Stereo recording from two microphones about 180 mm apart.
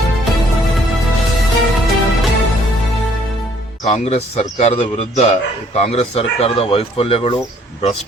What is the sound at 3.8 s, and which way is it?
A man's voice, 35° left (ahead or behind).